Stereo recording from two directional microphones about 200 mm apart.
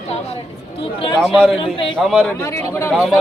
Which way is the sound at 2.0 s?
Centre (ahead or behind).